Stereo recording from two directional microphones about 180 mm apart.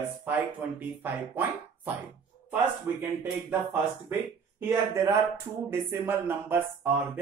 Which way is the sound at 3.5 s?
10° right (ahead or behind).